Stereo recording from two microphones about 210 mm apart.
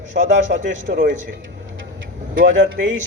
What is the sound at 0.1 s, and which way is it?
Speech, 40° right (ahead or behind).